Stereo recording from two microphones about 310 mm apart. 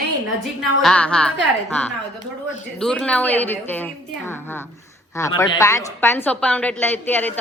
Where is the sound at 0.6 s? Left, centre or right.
Centre.